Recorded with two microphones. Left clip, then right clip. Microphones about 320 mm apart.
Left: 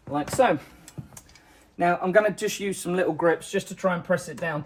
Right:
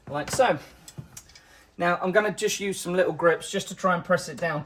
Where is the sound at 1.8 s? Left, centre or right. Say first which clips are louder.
Left 2 dB; centre.